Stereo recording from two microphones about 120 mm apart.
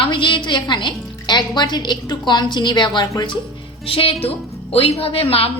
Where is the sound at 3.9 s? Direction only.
50° left (ahead or behind).